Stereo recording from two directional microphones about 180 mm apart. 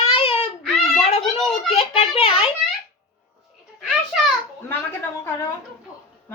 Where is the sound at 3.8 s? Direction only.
Centre (ahead or behind).